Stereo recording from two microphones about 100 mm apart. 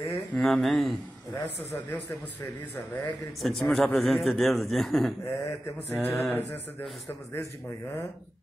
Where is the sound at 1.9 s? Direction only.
15° left (ahead or behind).